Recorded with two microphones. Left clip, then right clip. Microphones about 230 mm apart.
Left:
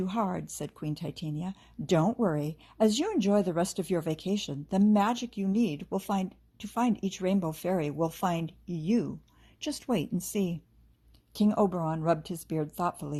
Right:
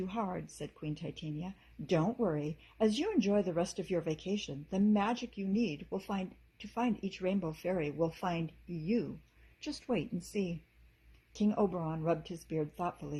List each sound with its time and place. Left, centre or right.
0.0 s speech: left